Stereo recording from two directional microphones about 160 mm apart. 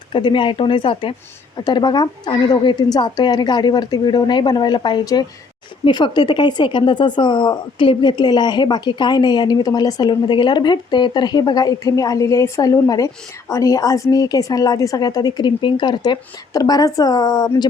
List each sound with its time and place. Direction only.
0.1 s speech: 30° left (ahead or behind)